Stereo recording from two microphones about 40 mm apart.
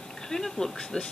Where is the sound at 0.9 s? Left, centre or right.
Left.